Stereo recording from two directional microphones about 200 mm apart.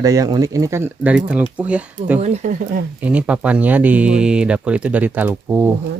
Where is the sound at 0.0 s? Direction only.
20° right (ahead or behind).